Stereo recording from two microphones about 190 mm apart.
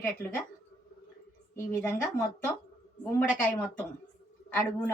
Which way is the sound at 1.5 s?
10° left (ahead or behind).